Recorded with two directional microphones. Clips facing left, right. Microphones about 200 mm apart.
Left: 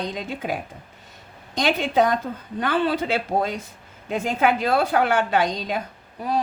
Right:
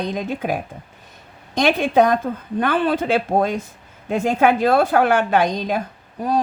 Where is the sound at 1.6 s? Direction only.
55° right (ahead or behind).